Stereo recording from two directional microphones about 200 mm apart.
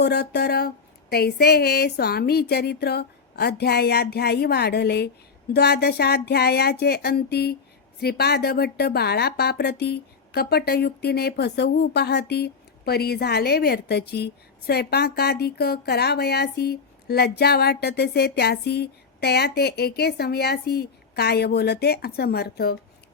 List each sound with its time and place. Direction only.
0.0 s speech: 55° left (ahead or behind)